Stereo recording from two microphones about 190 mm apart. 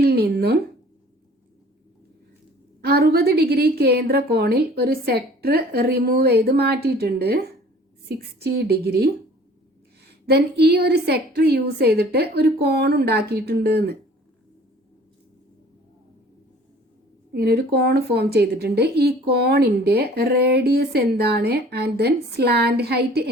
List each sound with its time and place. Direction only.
0.0 s a sound: 55° right (ahead or behind)
2.8 s a woman's voice: 55° right (ahead or behind)
8.5 s a woman's voice: 55° right (ahead or behind)
17.3 s a woman's voice: 55° right (ahead or behind)